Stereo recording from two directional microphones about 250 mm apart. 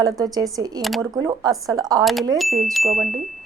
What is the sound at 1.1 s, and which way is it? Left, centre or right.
Speech, centre.